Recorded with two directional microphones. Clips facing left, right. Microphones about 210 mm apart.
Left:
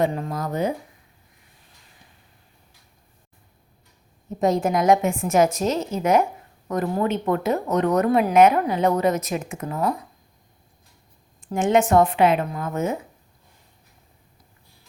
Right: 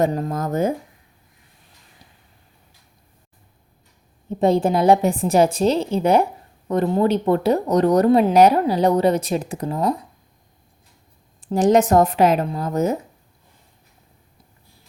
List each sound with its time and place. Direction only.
0.0 s speech: 40° right (ahead or behind)
4.3 s speech: 30° right (ahead or behind)
11.3 s speech: 35° right (ahead or behind)